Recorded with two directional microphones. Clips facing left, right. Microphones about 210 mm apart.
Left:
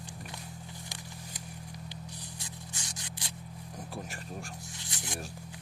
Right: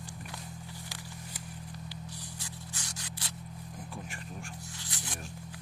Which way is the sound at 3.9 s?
40° left (ahead or behind).